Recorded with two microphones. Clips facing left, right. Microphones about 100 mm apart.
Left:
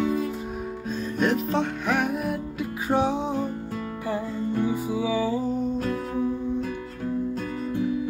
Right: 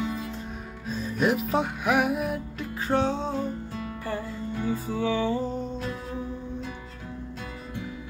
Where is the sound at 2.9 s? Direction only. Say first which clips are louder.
Left 2 dB; 15° left (ahead or behind).